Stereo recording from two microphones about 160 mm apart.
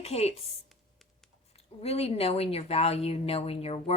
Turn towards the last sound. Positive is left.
turn(degrees=40)  # may be behind; listen again after turning